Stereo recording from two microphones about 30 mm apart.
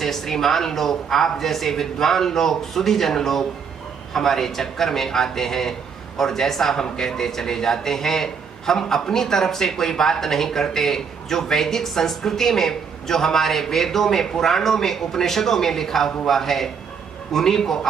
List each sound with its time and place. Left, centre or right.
0.0 s a man's voice: centre